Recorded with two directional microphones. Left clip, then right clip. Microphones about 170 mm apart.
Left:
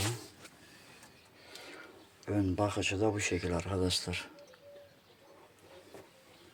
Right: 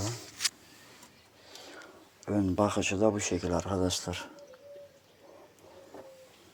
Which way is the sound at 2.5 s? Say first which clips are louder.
Right 6 dB; 20° right (ahead or behind).